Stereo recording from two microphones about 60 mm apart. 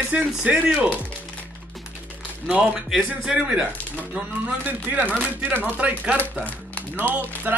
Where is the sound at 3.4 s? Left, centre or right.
Right.